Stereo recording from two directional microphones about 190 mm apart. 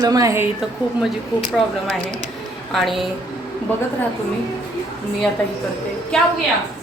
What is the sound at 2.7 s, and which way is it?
Speech, centre (ahead or behind).